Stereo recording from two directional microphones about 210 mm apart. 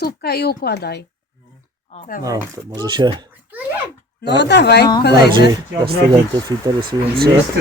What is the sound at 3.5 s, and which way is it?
Speech, 10° right (ahead or behind).